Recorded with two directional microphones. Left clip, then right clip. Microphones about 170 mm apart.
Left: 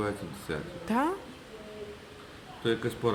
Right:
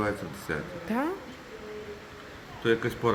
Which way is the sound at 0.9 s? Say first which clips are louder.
Left 2 dB; 15° left (ahead or behind).